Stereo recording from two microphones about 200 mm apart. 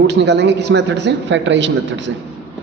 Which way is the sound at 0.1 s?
60° right (ahead or behind).